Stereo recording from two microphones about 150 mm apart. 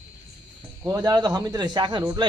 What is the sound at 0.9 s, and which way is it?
A man's voice, 25° right (ahead or behind).